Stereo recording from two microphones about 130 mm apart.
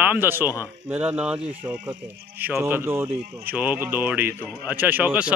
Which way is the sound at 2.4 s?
15° right (ahead or behind).